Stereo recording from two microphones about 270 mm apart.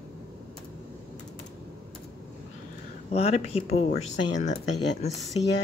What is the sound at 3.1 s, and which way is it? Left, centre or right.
Speech, left.